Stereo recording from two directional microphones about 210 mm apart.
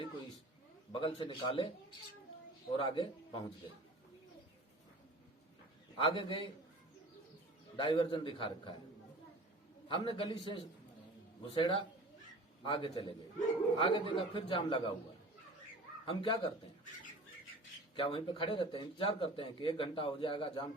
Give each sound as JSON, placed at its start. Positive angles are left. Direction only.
{"t": 0.9, "sound": "speech", "side_deg": 25}
{"t": 2.7, "sound": "speech", "side_deg": 25}
{"t": 6.0, "sound": "speech", "side_deg": 25}
{"t": 7.8, "sound": "speech", "side_deg": 20}
{"t": 9.9, "sound": "speech", "side_deg": 25}
{"t": 16.0, "sound": "speech", "side_deg": 25}
{"t": 17.9, "sound": "speech", "side_deg": 25}